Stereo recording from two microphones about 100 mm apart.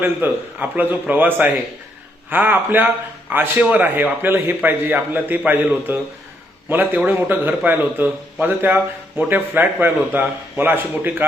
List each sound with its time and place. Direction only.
0.0 s a man's voice: 20° right (ahead or behind)